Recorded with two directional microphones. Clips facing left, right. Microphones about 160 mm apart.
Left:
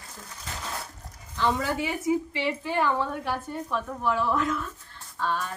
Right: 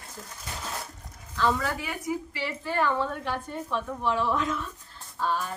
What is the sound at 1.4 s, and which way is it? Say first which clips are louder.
A woman's voice: left 1 dB; 20° left (ahead or behind).